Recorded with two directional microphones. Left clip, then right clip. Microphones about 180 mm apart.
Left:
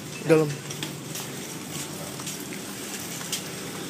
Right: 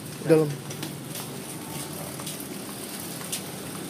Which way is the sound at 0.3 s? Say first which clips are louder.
Even; 10° right (ahead or behind).